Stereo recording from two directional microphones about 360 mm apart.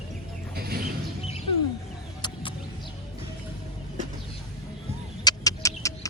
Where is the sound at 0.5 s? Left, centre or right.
Right.